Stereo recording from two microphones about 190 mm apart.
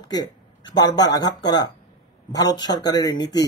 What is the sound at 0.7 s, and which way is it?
Speech, 20° left (ahead or behind).